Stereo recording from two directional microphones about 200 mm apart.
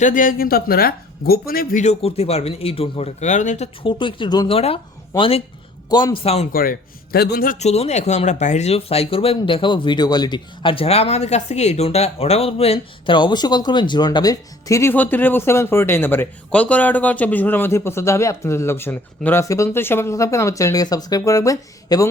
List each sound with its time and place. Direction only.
0.0 s a man's voice: 40° left (ahead or behind)
3.8 s speech: 25° left (ahead or behind)
6.5 s speech: 45° left (ahead or behind); by 22.0 s 15° left (ahead or behind)